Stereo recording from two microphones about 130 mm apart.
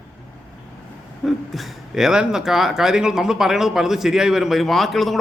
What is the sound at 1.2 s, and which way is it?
Speech, centre (ahead or behind).